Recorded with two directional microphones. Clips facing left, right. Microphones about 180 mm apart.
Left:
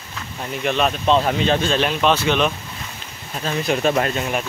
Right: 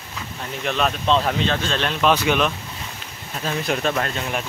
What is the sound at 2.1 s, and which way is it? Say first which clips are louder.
A man's voice: right 1 dB; 5° right (ahead or behind).